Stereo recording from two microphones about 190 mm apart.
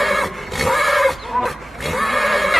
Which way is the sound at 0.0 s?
Centre (ahead or behind).